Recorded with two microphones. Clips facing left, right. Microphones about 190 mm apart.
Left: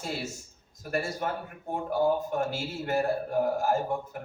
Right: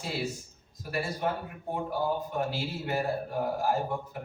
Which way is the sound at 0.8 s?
45° left (ahead or behind).